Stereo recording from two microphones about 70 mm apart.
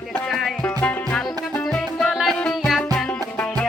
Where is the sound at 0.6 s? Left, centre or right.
Left.